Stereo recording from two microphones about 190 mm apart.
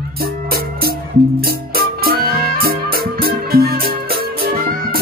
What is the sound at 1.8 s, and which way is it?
Music, 55° right (ahead or behind).